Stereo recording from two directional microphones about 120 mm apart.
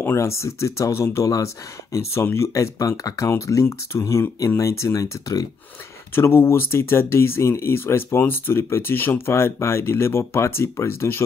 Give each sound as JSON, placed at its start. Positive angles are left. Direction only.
{"t": 0.0, "sound": "speech", "side_deg": 20}